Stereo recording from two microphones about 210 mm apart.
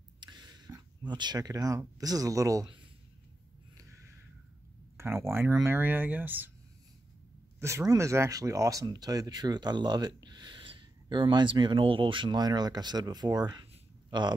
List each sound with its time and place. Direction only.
0.2 s speech: 20° right (ahead or behind)
3.7 s a sound: 15° right (ahead or behind)
4.9 s speech: 10° right (ahead or behind)
7.6 s speech: 15° right (ahead or behind)